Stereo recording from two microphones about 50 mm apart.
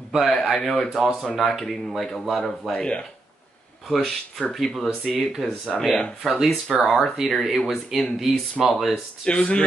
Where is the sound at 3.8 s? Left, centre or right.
Centre.